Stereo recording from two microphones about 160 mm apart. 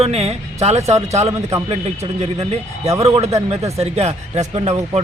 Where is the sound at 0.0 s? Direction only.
40° right (ahead or behind).